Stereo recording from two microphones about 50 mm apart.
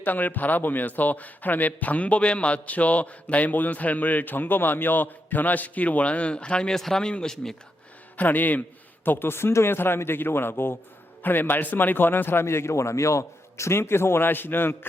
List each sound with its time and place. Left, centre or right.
0.0 s a man's voice: left; by 7.5 s centre
8.1 s a man's voice: left
9.0 s a man's voice: left
9.6 s a man's voice: left